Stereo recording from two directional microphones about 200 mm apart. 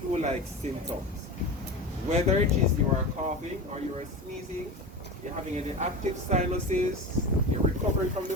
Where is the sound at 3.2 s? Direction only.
35° right (ahead or behind).